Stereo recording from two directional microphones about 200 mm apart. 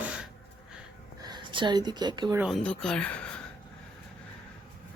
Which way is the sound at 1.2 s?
20° right (ahead or behind).